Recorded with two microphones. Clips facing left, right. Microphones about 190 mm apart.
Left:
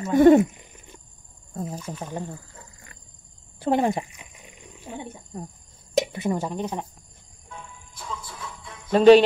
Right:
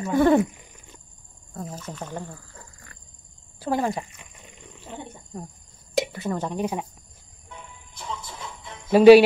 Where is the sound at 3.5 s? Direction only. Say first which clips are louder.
Left 3 dB; 20° left (ahead or behind).